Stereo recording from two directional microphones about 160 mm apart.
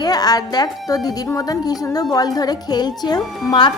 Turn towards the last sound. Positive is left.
turn(degrees=25)  # may be behind; listen again after turning